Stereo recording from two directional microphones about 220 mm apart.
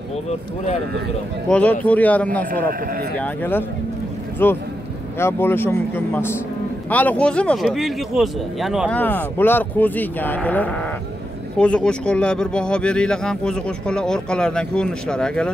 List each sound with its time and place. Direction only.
1.5 s speech: 5° left (ahead or behind)